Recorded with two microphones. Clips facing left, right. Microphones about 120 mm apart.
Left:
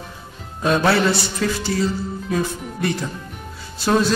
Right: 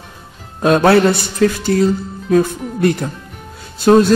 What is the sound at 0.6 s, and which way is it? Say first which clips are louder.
Speech: right 7 dB; 55° right (ahead or behind).